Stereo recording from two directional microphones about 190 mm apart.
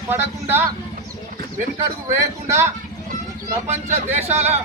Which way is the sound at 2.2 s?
15° right (ahead or behind).